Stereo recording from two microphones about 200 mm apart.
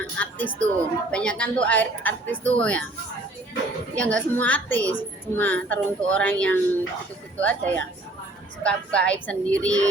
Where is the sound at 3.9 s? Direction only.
5° left (ahead or behind).